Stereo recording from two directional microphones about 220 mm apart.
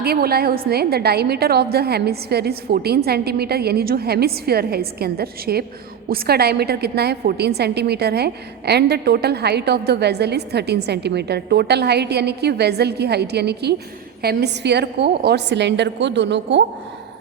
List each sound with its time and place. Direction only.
0.0 s a woman's voice: 45° right (ahead or behind)